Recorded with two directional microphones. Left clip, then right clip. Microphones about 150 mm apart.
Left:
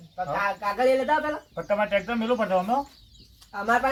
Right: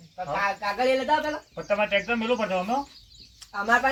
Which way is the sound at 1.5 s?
10° left (ahead or behind).